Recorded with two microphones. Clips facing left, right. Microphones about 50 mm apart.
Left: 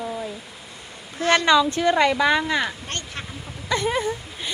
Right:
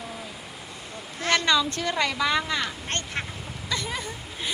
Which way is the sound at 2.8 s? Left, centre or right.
Right.